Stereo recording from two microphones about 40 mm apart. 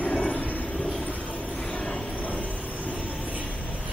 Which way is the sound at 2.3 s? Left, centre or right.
Left.